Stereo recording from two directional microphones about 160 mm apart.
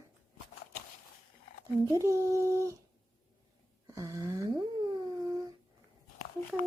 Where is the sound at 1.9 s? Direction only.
20° right (ahead or behind).